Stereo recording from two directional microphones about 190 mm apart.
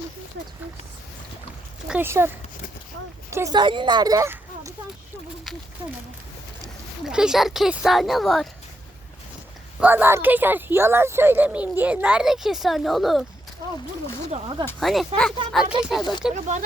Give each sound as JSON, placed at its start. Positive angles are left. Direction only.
{"t": 1.9, "sound": "speech", "side_deg": -10}
{"t": 7.0, "sound": "speech", "side_deg": -5}
{"t": 9.8, "sound": "speech", "side_deg": -10}
{"t": 14.8, "sound": "speech", "side_deg": 0}
{"t": 16.3, "sound": "speech", "side_deg": -40}